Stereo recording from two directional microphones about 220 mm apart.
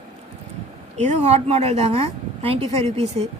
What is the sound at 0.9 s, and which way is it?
Speech, 30° right (ahead or behind).